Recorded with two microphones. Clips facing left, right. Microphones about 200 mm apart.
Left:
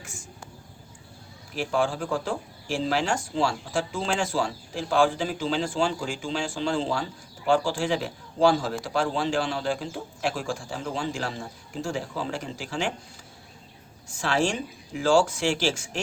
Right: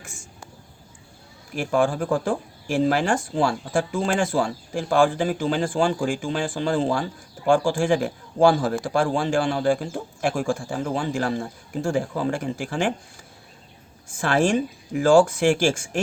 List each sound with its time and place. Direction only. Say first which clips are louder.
1.5 s speech: right 4 dB; 50° right (ahead or behind)
14.1 s speech: right 5 dB; 50° right (ahead or behind)